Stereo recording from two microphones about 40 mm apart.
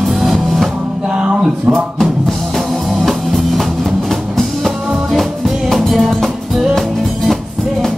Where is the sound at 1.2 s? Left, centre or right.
Right.